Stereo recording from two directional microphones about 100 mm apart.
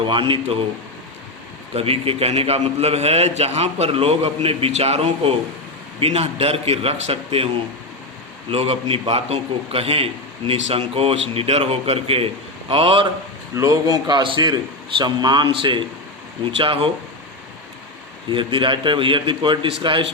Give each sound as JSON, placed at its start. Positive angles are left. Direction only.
{"t": 0.0, "sound": "a man's voice", "side_deg": -60}
{"t": 1.7, "sound": "a man's voice", "side_deg": -75}
{"t": 13.6, "sound": "a man's voice", "side_deg": -35}
{"t": 18.3, "sound": "a man's voice", "side_deg": -55}